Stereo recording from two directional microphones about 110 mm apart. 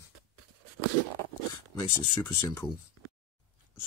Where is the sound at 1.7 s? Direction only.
35° left (ahead or behind).